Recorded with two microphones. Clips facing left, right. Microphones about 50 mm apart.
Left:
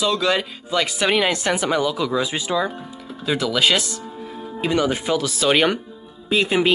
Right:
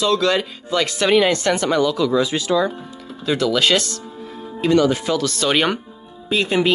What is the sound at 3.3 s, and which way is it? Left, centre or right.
Speech, centre.